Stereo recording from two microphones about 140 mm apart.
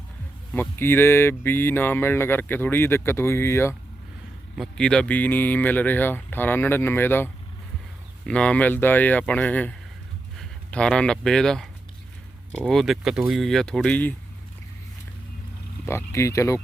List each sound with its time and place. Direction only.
0.5 s speech: 15° left (ahead or behind)
4.5 s speech: 5° left (ahead or behind)
8.3 s speech: 10° left (ahead or behind)
15.9 s speech: 20° left (ahead or behind)